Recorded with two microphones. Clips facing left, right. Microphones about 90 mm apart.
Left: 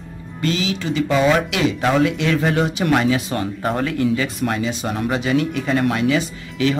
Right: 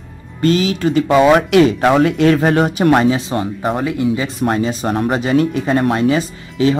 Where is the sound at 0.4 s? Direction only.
45° right (ahead or behind); by 3.4 s 25° right (ahead or behind).